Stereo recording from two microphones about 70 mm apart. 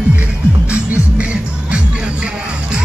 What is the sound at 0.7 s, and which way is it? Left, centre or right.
Music, centre.